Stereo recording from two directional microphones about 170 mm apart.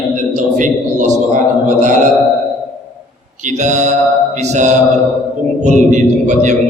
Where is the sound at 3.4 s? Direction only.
45° right (ahead or behind).